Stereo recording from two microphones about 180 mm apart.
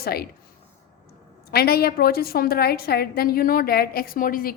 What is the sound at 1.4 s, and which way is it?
A woman's voice, 60° left (ahead or behind).